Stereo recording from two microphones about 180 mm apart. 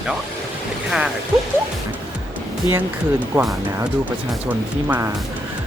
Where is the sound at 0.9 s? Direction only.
5° right (ahead or behind).